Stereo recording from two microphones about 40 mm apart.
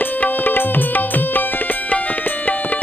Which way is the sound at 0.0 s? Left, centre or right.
Left.